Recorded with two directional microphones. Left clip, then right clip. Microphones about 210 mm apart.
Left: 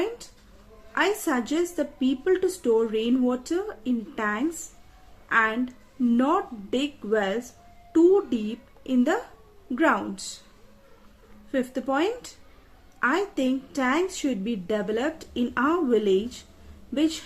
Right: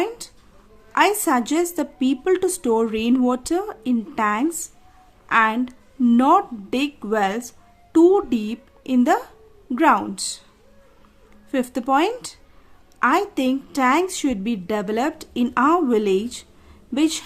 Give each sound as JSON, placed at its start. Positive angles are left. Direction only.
{"t": 0.9, "sound": "a woman's voice", "side_deg": -35}
{"t": 11.5, "sound": "a woman's voice", "side_deg": -35}